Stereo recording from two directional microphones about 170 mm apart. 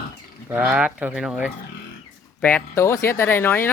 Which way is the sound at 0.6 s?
5° right (ahead or behind).